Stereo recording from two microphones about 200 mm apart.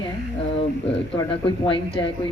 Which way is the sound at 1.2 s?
25° left (ahead or behind).